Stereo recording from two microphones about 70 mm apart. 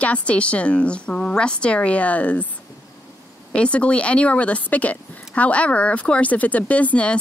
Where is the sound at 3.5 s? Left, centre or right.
Centre.